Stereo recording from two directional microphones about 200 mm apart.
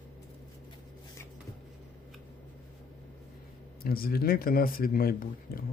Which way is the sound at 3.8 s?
50° left (ahead or behind).